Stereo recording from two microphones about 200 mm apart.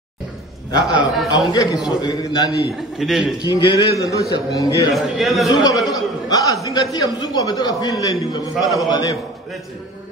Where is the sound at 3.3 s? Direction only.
20° left (ahead or behind).